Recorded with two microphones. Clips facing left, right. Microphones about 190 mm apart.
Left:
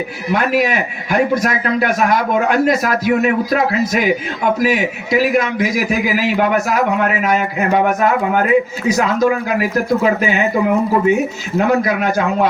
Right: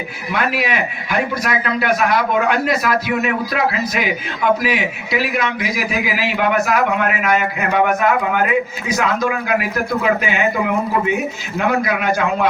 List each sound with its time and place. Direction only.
0.3 s a man's voice: 45° left (ahead or behind)